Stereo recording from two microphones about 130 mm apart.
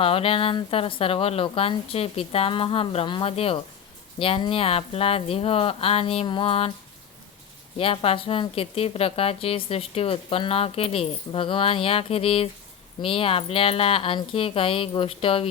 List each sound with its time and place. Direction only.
0.0 s a woman's voice: 45° left (ahead or behind)
7.8 s a woman's voice: 45° left (ahead or behind)